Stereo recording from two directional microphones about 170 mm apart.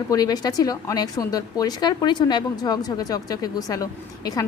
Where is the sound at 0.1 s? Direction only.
20° left (ahead or behind).